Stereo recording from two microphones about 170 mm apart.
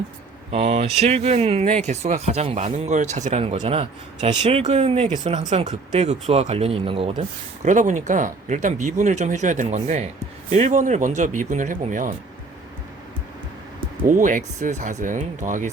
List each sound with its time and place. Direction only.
0.5 s speech: 35° right (ahead or behind)
14.1 s speech: 50° right (ahead or behind)